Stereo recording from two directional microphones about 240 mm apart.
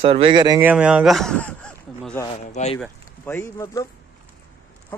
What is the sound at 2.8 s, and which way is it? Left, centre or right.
Speech, centre.